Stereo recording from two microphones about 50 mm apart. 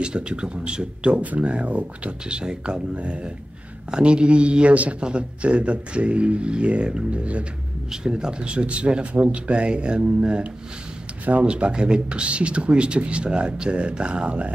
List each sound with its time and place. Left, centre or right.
0.0 s speech: centre
7.9 s speech: centre